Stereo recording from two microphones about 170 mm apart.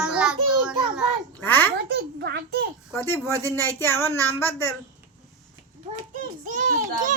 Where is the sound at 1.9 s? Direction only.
80° right.